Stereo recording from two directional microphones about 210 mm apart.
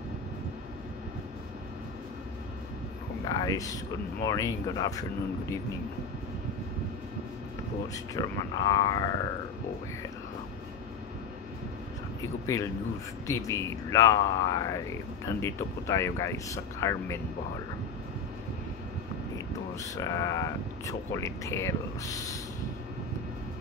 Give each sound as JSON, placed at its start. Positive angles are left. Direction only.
{"t": 3.3, "sound": "speech", "side_deg": 15}
{"t": 7.9, "sound": "speech", "side_deg": 15}
{"t": 12.2, "sound": "speech", "side_deg": 15}
{"t": 19.3, "sound": "speech", "side_deg": 15}